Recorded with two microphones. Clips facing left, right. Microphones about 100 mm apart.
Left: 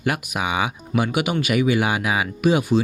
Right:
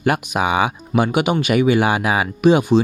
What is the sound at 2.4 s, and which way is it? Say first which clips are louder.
Speech: right 5 dB; 30° right (ahead or behind).